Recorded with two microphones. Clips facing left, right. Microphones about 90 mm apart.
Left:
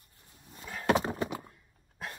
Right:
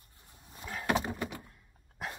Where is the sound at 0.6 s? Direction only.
5° right (ahead or behind).